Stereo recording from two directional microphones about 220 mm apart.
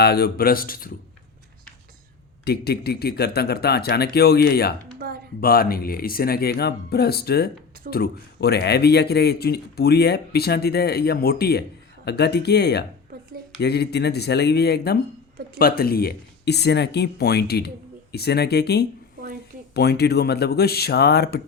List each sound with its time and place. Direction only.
0.0 s speech: 45° left (ahead or behind)
2.4 s speech: 45° left (ahead or behind)
4.9 s a sound: 45° right (ahead or behind)
5.4 s speech: 45° left (ahead or behind)